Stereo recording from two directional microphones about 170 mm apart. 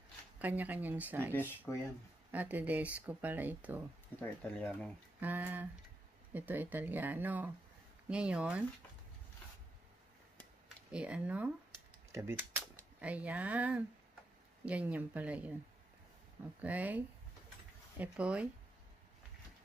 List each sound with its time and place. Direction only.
0.4 s speech: 10° right (ahead or behind)
1.7 s speech: 15° left (ahead or behind)
2.3 s speech: 10° right (ahead or behind)
4.2 s speech: 10° left (ahead or behind)
5.2 s speech: 10° right (ahead or behind)
10.9 s speech: 5° right (ahead or behind)
16.6 s speech: 10° right (ahead or behind)